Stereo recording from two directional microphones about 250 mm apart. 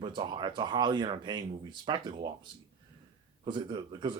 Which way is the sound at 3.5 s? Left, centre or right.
Centre.